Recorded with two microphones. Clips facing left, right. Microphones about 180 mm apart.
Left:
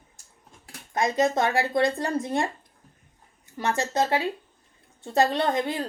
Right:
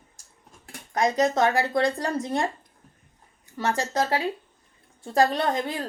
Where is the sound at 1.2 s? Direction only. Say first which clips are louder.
Even; 20° left (ahead or behind).